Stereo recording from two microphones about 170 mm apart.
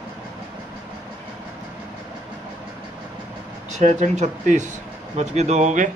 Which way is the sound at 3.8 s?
45° right (ahead or behind).